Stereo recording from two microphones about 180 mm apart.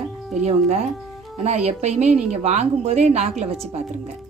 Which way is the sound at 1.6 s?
40° right (ahead or behind).